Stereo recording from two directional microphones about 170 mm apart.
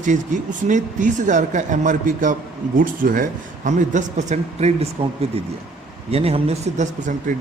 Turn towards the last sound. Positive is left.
turn(degrees=-50)  # may be behind; listen again after turning